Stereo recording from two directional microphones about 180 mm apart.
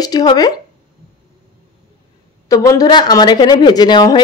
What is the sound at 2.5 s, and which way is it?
Speech, 20° left (ahead or behind).